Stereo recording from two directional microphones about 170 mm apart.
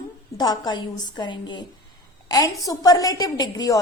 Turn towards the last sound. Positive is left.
turn(degrees=25)  # may be behind; listen again after turning